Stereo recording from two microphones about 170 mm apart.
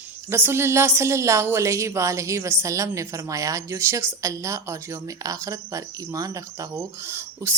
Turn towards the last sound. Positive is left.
turn(degrees=-15)  # may be behind; listen again after turning